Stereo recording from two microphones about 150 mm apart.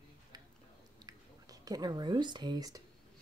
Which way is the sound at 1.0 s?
25° right (ahead or behind).